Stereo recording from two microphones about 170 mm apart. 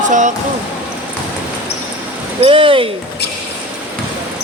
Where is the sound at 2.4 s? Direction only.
30° right (ahead or behind).